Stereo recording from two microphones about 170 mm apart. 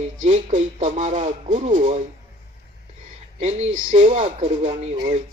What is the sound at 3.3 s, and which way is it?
A man's voice, 40° right (ahead or behind).